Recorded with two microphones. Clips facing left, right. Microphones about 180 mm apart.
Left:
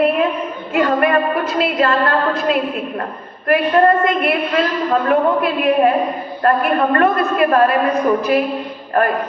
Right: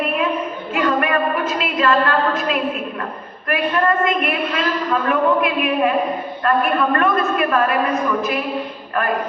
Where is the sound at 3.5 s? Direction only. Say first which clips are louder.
Left 6 dB; 35° left (ahead or behind).